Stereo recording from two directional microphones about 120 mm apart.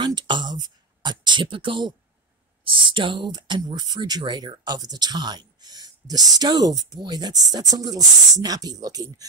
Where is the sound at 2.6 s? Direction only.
45° right (ahead or behind).